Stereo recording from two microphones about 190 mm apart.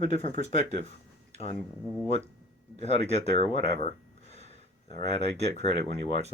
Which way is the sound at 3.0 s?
35° right (ahead or behind).